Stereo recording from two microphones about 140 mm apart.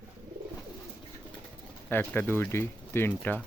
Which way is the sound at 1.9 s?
15° left (ahead or behind).